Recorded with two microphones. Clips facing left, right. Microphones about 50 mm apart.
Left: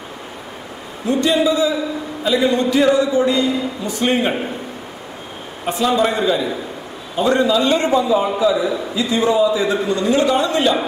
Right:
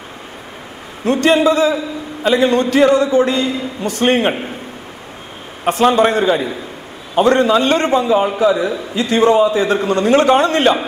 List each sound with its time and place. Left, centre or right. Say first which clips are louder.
1.0 s a man's voice: right 4 dB; right
5.7 s a man's voice: right 5 dB; right